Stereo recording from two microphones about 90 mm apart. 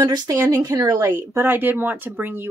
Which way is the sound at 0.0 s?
50° right (ahead or behind).